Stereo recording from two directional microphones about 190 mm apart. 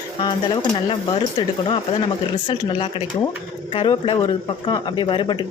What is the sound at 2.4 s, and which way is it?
Speech, 25° left (ahead or behind).